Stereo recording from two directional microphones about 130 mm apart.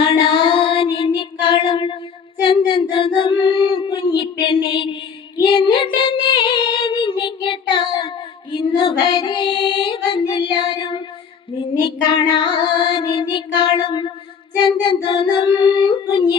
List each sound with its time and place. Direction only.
0.0 s child singing: 40° left (ahead or behind)
8.5 s female singing: 40° left (ahead or behind)
11.8 s child singing: 40° left (ahead or behind)